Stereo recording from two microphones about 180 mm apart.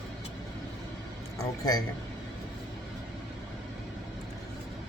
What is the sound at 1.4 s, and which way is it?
Speech, 20° left (ahead or behind).